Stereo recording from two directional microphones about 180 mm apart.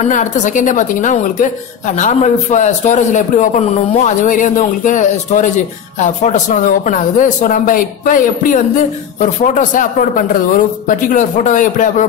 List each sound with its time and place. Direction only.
0.0 s a man's voice: 45° left (ahead or behind)